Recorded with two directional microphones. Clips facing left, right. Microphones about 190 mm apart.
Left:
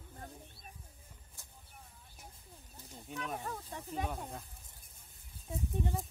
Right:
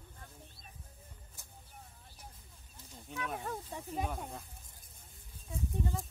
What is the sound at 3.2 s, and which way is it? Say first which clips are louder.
Speech: right 2 dB; centre (ahead or behind).